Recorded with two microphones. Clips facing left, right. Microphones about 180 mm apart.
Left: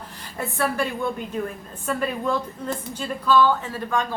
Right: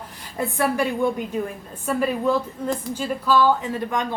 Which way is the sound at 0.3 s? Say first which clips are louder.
Right 3 dB; 15° right (ahead or behind).